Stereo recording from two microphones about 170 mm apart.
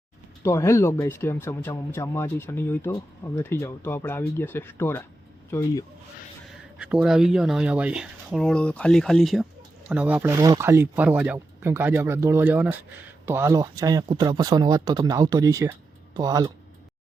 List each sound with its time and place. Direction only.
0.4 s speech: 15° left (ahead or behind)
6.7 s speech: 5° right (ahead or behind); by 16.5 s 20° right (ahead or behind)